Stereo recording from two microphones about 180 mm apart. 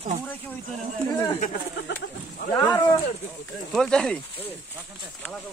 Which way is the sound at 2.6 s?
10° left (ahead or behind).